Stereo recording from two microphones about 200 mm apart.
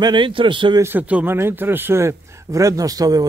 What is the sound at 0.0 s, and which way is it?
Speech, 25° right (ahead or behind).